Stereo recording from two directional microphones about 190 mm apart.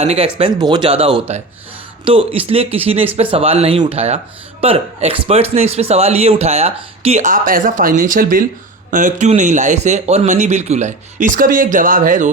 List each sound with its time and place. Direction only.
0.0 s speech: 30° right (ahead or behind)